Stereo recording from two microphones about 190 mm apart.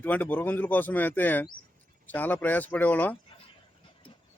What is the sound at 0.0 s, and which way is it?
Speech, 10° left (ahead or behind).